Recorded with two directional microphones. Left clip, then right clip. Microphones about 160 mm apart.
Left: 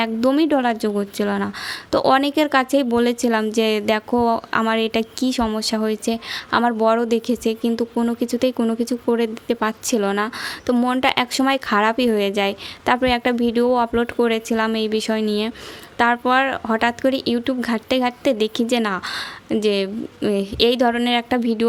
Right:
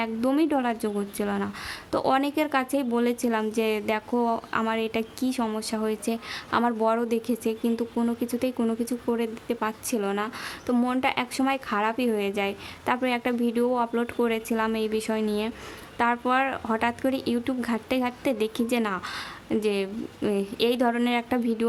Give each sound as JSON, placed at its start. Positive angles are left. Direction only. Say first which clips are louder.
{"t": 0.0, "sound": "speech", "louder": "left 7 dB", "side_deg": 20}